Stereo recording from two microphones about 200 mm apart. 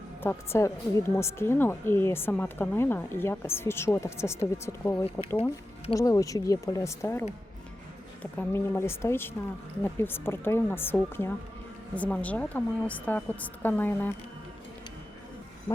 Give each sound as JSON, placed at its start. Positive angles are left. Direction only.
{"t": 0.2, "sound": "a woman's voice", "side_deg": 10}